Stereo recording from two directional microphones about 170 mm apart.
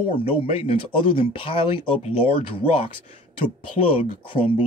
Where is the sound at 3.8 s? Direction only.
30° left (ahead or behind).